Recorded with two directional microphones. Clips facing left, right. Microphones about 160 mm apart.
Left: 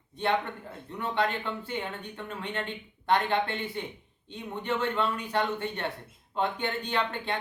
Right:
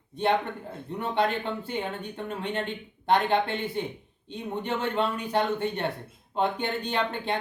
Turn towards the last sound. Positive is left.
turn(degrees=-20)  # may be behind; listen again after turning